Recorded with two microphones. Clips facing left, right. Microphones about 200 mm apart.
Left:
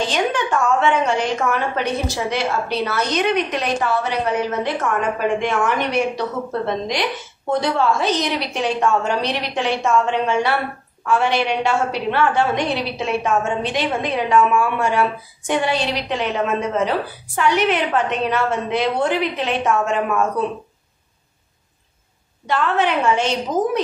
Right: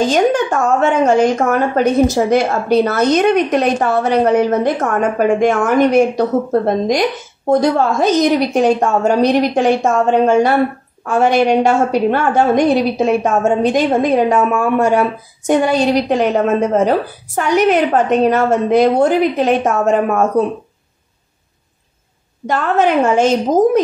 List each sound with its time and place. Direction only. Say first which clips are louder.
0.0 s a woman's voice: right 8 dB; 45° right (ahead or behind)
22.5 s a woman's voice: right 5 dB; 45° right (ahead or behind)